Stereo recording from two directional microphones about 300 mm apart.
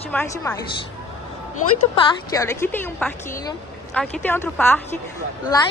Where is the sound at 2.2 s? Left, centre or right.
Centre.